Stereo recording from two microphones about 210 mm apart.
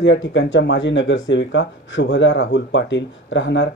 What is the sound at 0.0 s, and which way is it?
Speech, 60° left (ahead or behind).